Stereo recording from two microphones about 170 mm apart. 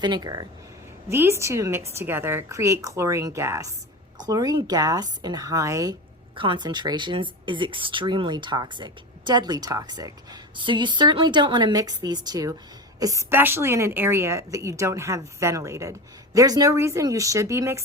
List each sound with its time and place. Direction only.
0.0 s a woman's voice: 25° right (ahead or behind)